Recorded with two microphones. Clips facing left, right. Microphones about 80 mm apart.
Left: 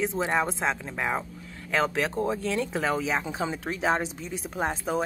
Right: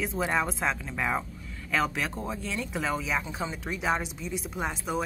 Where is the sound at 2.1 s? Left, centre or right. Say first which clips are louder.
Left 6 dB; left.